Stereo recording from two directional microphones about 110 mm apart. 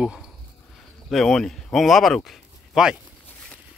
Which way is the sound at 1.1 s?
5° left (ahead or behind).